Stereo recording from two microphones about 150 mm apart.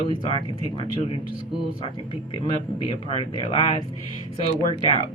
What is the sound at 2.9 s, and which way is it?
A woman's voice, 40° left (ahead or behind).